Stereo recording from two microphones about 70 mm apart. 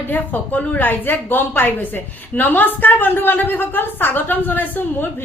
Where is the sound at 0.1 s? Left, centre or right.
Left.